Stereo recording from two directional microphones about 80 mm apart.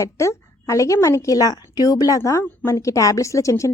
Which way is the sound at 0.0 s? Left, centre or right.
Left.